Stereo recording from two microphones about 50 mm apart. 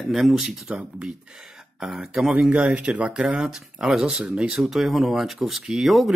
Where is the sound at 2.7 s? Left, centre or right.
Right.